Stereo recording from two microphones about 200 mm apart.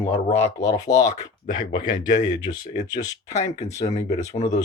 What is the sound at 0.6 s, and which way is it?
Speech, 15° left (ahead or behind).